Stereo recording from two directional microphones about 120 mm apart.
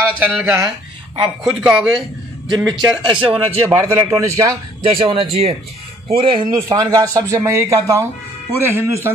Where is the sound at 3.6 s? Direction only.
25° right (ahead or behind).